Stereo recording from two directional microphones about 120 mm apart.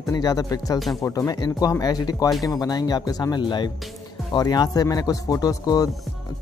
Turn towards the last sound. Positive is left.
turn(degrees=30)  # may be behind; listen again after turning